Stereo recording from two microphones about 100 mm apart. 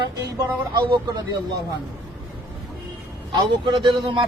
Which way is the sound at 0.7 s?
55° right (ahead or behind).